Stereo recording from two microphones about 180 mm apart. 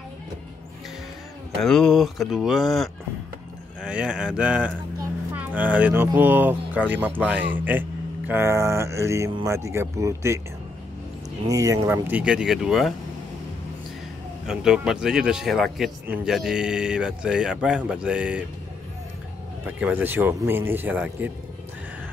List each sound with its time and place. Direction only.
1.6 s speech: 5° left (ahead or behind); by 10.4 s 15° right (ahead or behind)
11.4 s speech: 20° right (ahead or behind); by 12.9 s centre (ahead or behind)
14.4 s speech: 5° right (ahead or behind)
19.6 s speech: 10° right (ahead or behind)